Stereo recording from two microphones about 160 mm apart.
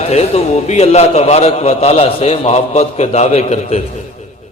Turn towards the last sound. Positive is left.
turn(degrees=45)  # may be behind; listen again after turning